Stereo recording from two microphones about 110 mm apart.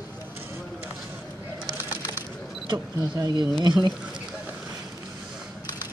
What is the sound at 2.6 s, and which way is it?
Speech, 35° right (ahead or behind).